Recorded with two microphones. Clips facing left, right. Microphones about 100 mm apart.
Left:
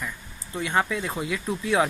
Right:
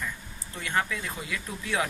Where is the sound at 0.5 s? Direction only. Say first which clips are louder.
Left 5 dB; 20° left (ahead or behind).